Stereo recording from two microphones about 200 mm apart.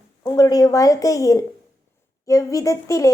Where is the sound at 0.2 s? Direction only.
15° left (ahead or behind).